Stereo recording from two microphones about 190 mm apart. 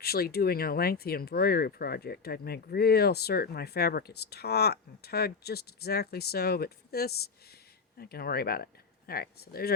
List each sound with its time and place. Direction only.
0.0 s speech: 55° left (ahead or behind)